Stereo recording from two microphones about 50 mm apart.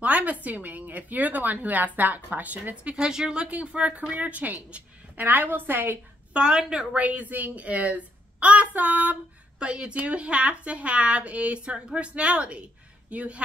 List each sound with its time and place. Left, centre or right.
0.0 s a woman's voice: right
3.1 s speech: centre
3.4 s a woman's voice: right
6.3 s speech: centre
6.9 s a woman's voice: right